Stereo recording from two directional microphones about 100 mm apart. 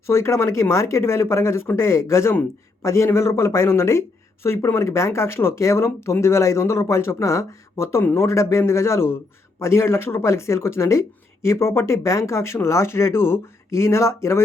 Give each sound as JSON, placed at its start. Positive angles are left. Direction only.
{"t": 0.0, "sound": "speech", "side_deg": 25}